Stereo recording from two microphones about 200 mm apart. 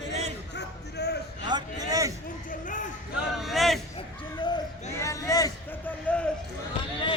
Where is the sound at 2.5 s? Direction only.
40° left (ahead or behind).